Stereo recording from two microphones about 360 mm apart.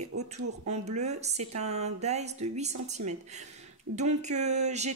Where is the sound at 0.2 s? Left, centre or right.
Centre.